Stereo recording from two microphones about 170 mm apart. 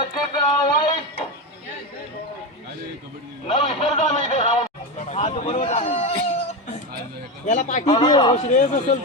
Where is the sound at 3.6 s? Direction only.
35° left (ahead or behind).